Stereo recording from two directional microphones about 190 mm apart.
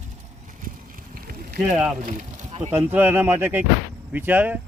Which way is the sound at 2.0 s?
40° right (ahead or behind).